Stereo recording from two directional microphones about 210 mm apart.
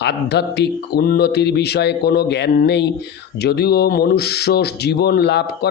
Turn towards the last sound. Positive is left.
turn(degrees=50)  # may be behind; listen again after turning